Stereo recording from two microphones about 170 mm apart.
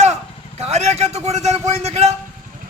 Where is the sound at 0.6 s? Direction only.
40° right (ahead or behind).